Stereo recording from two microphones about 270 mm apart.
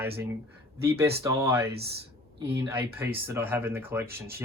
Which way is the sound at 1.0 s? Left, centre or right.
Centre.